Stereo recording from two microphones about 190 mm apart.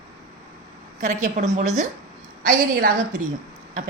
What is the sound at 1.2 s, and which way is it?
Speech, 40° right (ahead or behind).